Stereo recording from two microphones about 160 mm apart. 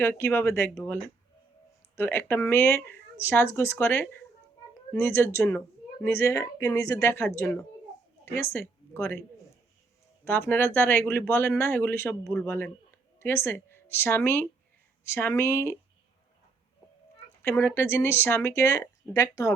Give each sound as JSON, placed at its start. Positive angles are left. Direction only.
{"t": 0.0, "sound": "speech", "side_deg": 15}
{"t": 2.0, "sound": "a woman's voice", "side_deg": 15}
{"t": 10.2, "sound": "speech", "side_deg": 15}
{"t": 17.4, "sound": "speech", "side_deg": 15}